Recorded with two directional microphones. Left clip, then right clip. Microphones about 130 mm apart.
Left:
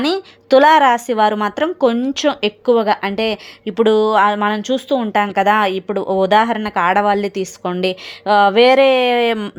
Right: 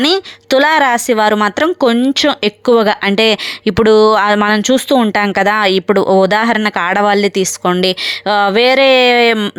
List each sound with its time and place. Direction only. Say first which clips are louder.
0.0 s a woman's voice: right 6 dB; 30° right (ahead or behind)
2.6 s a woman's voice: right 4 dB; 40° right (ahead or behind)